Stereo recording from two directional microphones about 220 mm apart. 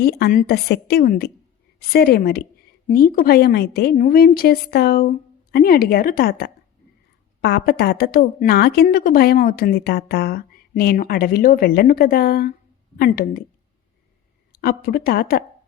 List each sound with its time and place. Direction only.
0.0 s a woman's voice: 45° left (ahead or behind)
14.5 s a woman's voice: 45° left (ahead or behind)